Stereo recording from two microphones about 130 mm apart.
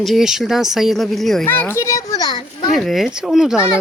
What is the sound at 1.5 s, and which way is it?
Children playing, 15° left (ahead or behind).